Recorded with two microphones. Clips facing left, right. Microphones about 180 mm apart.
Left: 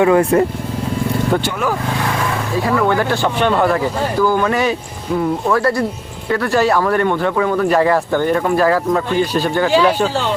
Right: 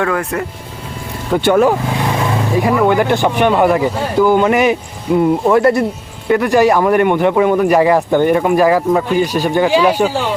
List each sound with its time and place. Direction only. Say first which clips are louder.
0.0 s speech: left 6 dB; 25° left (ahead or behind)
1.6 s speech: right 5 dB; 20° right (ahead or behind)